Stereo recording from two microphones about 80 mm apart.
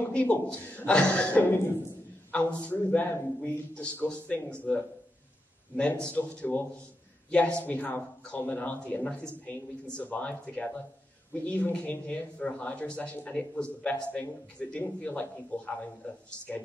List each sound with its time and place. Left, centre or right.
0.1 s a man's voice: centre